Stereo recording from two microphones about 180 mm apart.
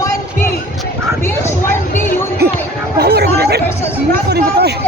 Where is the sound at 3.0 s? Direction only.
60° right (ahead or behind).